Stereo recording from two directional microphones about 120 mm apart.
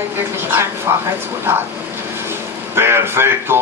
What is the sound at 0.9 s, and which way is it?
Speech, 20° right (ahead or behind).